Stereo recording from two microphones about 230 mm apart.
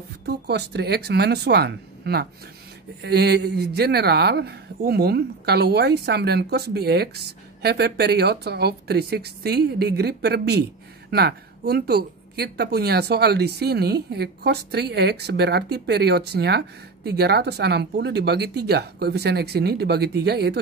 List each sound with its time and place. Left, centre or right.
0.3 s speech: right